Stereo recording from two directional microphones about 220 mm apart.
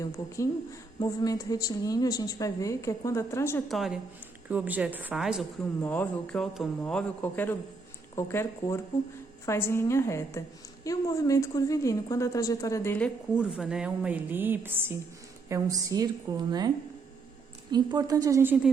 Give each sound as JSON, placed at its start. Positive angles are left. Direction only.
{"t": 0.0, "sound": "a woman's voice", "side_deg": 15}
{"t": 3.7, "sound": "a man's voice", "side_deg": 0}
{"t": 5.8, "sound": "a man's voice", "side_deg": 10}
{"t": 13.3, "sound": "a woman's voice", "side_deg": -5}